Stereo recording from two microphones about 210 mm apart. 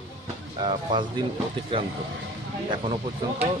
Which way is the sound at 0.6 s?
20° right (ahead or behind).